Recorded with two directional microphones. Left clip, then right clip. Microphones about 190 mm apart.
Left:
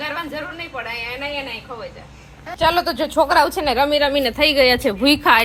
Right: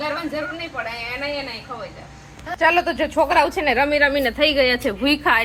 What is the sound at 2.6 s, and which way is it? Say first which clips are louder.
Speech: even; 10° left (ahead or behind).